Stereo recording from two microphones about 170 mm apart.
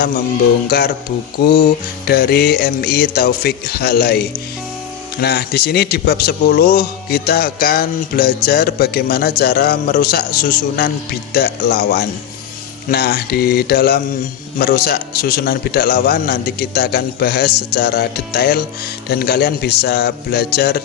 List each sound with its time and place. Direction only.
0.7 s a man's voice: 65° left (ahead or behind)
1.4 s music: 65° left (ahead or behind)
5.2 s a man's voice: 70° left (ahead or behind)
11.3 s music: 70° left (ahead or behind)
14.6 s a man's voice: 65° left (ahead or behind)
19.0 s music: 70° left (ahead or behind)